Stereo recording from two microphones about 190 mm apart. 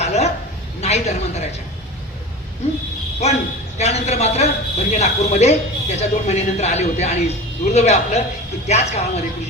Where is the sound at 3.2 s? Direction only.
35° left (ahead or behind).